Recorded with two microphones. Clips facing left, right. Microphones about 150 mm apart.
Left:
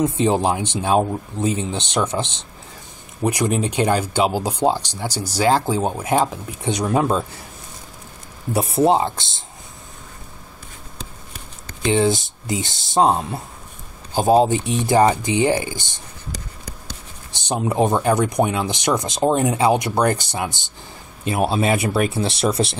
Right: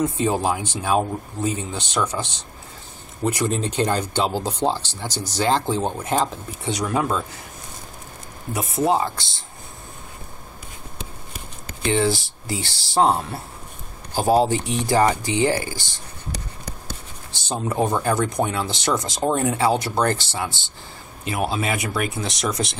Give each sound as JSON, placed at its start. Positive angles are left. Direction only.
{"t": 0.0, "sound": "speech", "side_deg": 20}
{"t": 8.5, "sound": "speech", "side_deg": 30}
{"t": 11.9, "sound": "speech", "side_deg": 20}
{"t": 17.3, "sound": "speech", "side_deg": 15}